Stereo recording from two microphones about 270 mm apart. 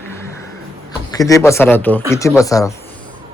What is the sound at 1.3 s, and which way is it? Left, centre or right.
Speech, centre.